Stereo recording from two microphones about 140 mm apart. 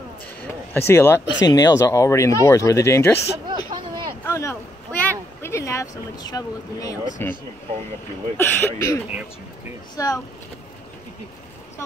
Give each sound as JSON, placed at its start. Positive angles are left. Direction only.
{"t": 0.7, "sound": "speech", "side_deg": 15}
{"t": 3.4, "sound": "a sound", "side_deg": -30}
{"t": 4.3, "sound": "a sound", "side_deg": 20}
{"t": 5.4, "sound": "speech", "side_deg": 20}
{"t": 7.2, "sound": "speech", "side_deg": 15}
{"t": 8.4, "sound": "speech", "side_deg": 15}